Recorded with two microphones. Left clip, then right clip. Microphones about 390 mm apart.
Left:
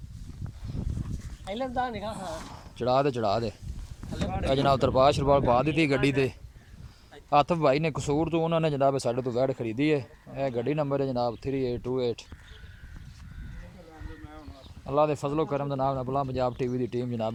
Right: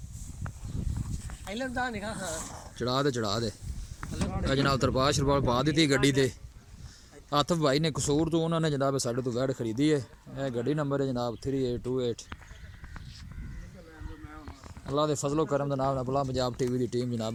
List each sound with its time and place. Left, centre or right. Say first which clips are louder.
1.5 s speech: left 2 dB; centre
4.1 s a sound: left 3 dB; left
4.4 s speech: left 4 dB; centre
14.8 s speech: left 3 dB; centre